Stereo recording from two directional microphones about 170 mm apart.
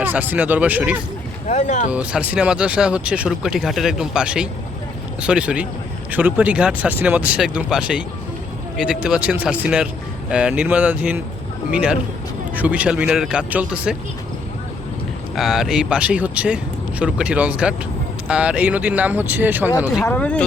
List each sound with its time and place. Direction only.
0.0 s speech: 10° right (ahead or behind)
1.5 s speech: 45° left (ahead or behind)
1.9 s speech: 5° right (ahead or behind)
15.4 s speech: centre (ahead or behind)
20.1 s speech: 10° left (ahead or behind)